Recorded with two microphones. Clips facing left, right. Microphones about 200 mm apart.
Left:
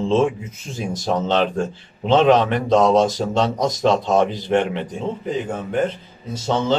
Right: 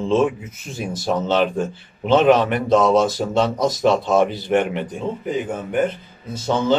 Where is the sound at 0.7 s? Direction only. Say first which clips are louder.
Even; 10° right (ahead or behind).